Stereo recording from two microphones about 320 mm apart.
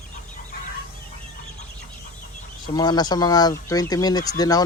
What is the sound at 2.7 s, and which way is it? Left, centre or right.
Speech, centre.